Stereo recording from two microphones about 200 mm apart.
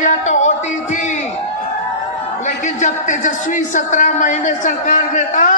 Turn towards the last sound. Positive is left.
turn(degrees=40)  # may be behind; listen again after turning